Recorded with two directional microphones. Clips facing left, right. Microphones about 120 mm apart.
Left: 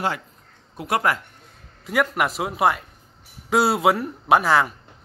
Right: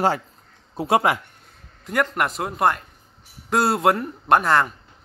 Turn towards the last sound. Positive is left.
turn(degrees=0)  # may be behind; listen again after turning